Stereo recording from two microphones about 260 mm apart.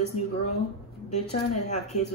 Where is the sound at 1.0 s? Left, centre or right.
Left.